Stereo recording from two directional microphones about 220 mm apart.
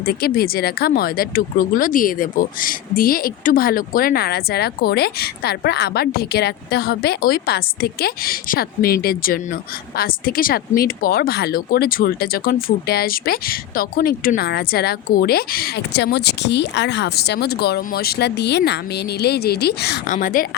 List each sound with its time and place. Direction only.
0.0 s speech: 45° left (ahead or behind)
20.1 s a woman's voice: 35° left (ahead or behind)